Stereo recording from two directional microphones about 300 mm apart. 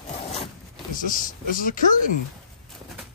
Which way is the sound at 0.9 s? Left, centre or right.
Left.